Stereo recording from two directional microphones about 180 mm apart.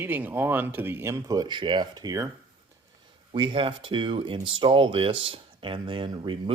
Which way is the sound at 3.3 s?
30° right (ahead or behind).